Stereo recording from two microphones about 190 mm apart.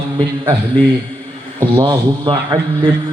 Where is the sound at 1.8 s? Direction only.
25° right (ahead or behind).